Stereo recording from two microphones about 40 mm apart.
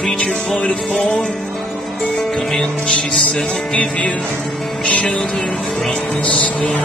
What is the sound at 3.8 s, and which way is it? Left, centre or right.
Music, left.